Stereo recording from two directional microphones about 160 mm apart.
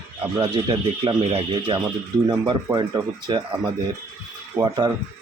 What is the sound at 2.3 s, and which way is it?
Speech, 25° right (ahead or behind).